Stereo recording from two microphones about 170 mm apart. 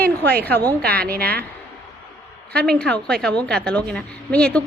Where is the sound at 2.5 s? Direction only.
5° left (ahead or behind).